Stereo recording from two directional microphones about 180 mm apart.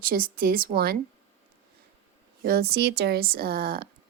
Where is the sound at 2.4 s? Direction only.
60° right (ahead or behind).